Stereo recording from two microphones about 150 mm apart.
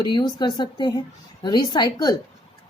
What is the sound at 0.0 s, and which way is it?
A woman's voice, 30° left (ahead or behind).